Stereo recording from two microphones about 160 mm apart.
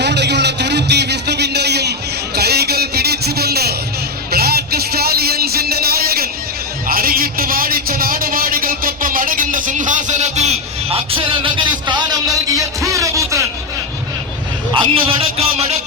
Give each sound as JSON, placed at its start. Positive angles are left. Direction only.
{"t": 0.0, "sound": "a sound", "side_deg": -90}
{"t": 10.9, "sound": "music", "side_deg": -35}
{"t": 14.8, "sound": "music", "side_deg": -35}